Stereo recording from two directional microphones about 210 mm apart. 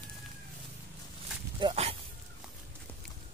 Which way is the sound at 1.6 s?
25° right (ahead or behind).